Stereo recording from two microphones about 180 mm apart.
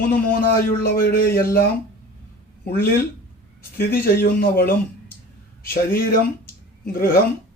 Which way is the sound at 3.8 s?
55° left (ahead or behind).